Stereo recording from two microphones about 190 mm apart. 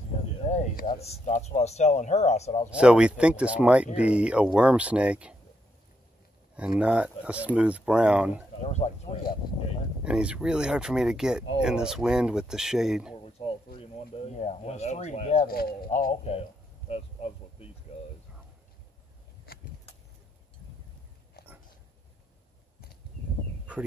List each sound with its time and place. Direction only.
0.5 s a sound: 40° left (ahead or behind)
0.8 s speech: 35° left (ahead or behind)
2.7 s speech: 5° right (ahead or behind)
6.8 s speech: 5° right (ahead or behind)
8.6 s speech: 35° left (ahead or behind)
10.0 s speech: 5° right (ahead or behind)
13.2 s a sound: 30° left (ahead or behind)
13.7 s speech: 30° left (ahead or behind)
15.4 s speech: 50° left (ahead or behind); by 16.4 s 35° left (ahead or behind)
16.9 s a sound: 30° left (ahead or behind)
19.5 s vehicle: 50° left (ahead or behind)